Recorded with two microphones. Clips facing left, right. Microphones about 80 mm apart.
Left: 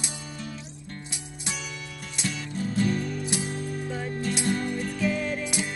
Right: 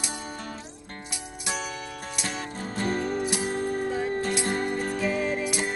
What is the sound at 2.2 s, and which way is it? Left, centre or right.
Music, right.